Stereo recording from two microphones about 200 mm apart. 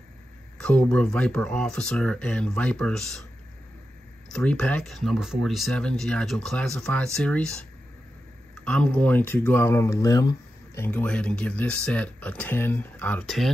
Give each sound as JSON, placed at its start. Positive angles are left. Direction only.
{"t": 0.6, "sound": "speech", "side_deg": 5}
{"t": 4.3, "sound": "speech", "side_deg": 5}
{"t": 8.6, "sound": "speech", "side_deg": 5}